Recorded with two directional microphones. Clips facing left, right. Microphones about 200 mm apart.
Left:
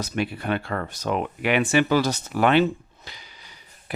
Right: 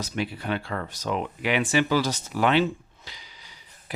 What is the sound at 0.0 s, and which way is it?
Speech, 60° left (ahead or behind).